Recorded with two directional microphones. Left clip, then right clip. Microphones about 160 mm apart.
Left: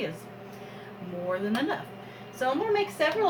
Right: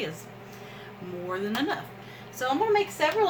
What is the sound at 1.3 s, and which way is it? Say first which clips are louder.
A woman's voice: right 1 dB; 20° right (ahead or behind).